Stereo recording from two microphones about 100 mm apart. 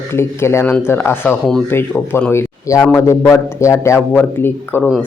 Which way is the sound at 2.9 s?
30° left (ahead or behind).